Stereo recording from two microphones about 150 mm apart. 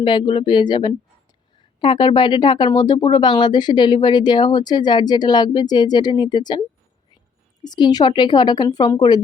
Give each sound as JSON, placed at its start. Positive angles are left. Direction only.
{"t": 0.0, "sound": "speech", "side_deg": 30}
{"t": 7.6, "sound": "speech", "side_deg": 25}